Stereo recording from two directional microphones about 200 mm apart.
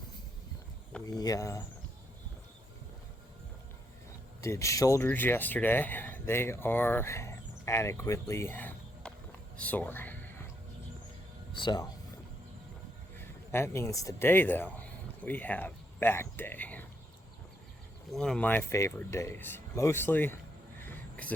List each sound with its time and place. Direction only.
1.0 s speech: 20° left (ahead or behind)
4.4 s speech: 15° left (ahead or behind)
9.6 s a sound: 5° left (ahead or behind)
11.5 s speech: 20° left (ahead or behind)
13.1 s speech: 10° left (ahead or behind)
18.1 s speech: 5° left (ahead or behind)
20.8 s a sound: 10° left (ahead or behind)